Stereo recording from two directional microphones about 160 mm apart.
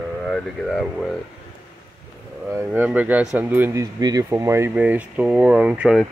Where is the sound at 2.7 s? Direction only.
10° right (ahead or behind).